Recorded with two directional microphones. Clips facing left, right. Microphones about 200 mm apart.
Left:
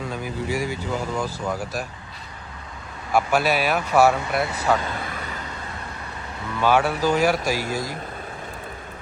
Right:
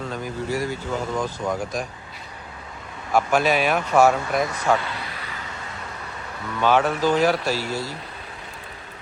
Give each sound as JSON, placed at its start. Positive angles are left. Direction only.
{"t": 0.0, "sound": "speech", "side_deg": 10}
{"t": 3.1, "sound": "speech", "side_deg": 10}
{"t": 4.9, "sound": "vehicle", "side_deg": 50}
{"t": 6.6, "sound": "speech", "side_deg": 10}